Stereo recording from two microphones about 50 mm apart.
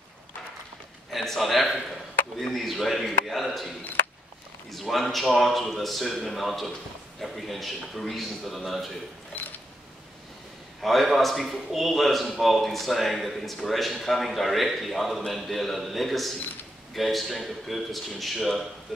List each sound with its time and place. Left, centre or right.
1.1 s a man's voice: centre
9.3 s camera: left
10.8 s a man's voice: centre